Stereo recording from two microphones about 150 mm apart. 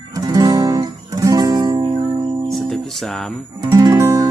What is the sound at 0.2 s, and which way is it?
Music, 25° right (ahead or behind).